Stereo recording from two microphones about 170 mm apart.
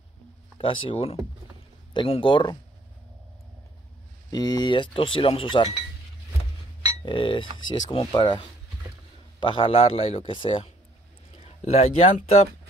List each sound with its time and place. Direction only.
0.6 s a man's voice: 30° left (ahead or behind)
4.3 s speech: 25° left (ahead or behind)
7.1 s speech: 30° left (ahead or behind)
9.4 s a man's voice: 30° left (ahead or behind)